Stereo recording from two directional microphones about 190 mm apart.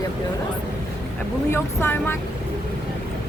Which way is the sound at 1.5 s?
15° left (ahead or behind).